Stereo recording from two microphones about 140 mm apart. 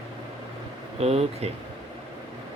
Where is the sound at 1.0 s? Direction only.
45° right (ahead or behind).